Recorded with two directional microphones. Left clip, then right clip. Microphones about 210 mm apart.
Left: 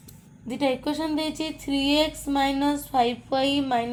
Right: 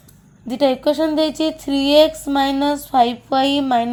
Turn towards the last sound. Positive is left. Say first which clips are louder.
# right 7 dB
turn(degrees=-50)  # may be behind; listen again after turning